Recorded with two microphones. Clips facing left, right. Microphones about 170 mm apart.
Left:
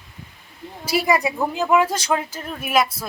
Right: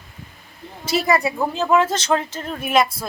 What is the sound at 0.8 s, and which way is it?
Speech, 10° left (ahead or behind).